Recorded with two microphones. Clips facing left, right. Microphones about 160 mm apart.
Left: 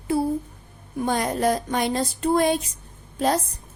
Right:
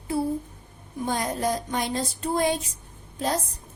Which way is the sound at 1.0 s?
70° left (ahead or behind).